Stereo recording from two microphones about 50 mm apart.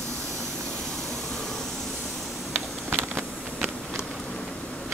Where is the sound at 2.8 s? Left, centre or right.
Right.